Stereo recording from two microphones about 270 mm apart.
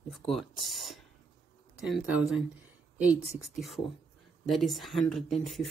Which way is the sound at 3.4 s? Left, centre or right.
Centre.